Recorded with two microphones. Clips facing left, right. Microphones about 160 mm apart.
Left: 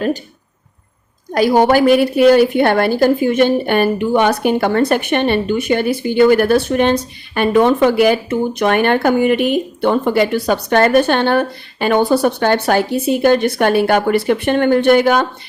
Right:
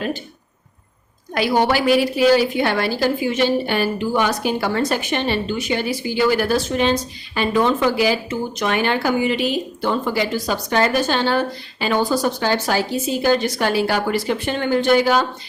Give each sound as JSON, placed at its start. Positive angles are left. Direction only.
{"t": 1.3, "sound": "a woman's voice", "side_deg": 45}